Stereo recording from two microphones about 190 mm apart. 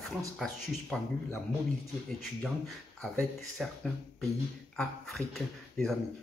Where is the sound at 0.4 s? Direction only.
5° left (ahead or behind).